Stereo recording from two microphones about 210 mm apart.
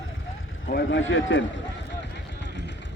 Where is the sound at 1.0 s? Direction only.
65° left (ahead or behind).